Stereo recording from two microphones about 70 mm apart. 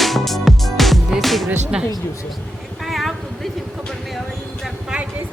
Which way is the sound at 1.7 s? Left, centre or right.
Centre.